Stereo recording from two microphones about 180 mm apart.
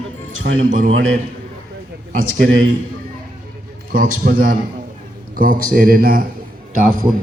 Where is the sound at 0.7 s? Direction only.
50° right (ahead or behind).